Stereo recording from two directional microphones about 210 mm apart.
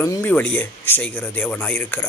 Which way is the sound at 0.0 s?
15° left (ahead or behind).